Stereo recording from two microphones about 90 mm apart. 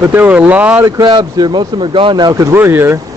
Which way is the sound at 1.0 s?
55° right (ahead or behind).